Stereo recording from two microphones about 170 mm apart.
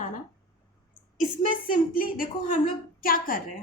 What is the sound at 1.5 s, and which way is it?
A woman's voice, 55° left (ahead or behind).